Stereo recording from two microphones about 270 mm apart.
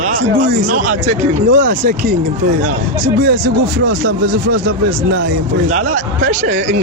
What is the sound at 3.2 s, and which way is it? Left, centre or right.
Speech, right.